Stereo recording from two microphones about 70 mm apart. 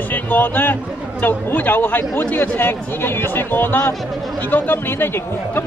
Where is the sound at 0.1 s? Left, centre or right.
Left.